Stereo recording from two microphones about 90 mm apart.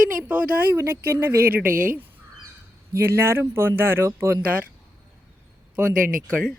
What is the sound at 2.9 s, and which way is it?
Speech, 30° right (ahead or behind).